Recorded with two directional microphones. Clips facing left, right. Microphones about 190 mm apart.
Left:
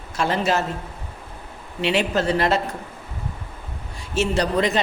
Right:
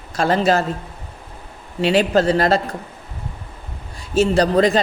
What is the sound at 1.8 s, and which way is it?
Speech, 35° right (ahead or behind).